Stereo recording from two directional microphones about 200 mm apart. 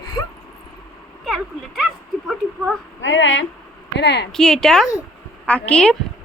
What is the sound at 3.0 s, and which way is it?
A woman's voice, 70° left (ahead or behind).